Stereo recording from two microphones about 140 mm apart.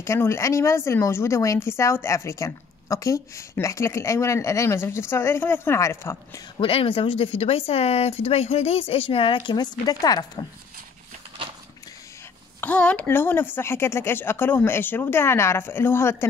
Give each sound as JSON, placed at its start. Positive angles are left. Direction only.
{"t": 0.0, "sound": "speech", "side_deg": 20}
{"t": 6.6, "sound": "speech", "side_deg": 40}
{"t": 12.5, "sound": "speech", "side_deg": 10}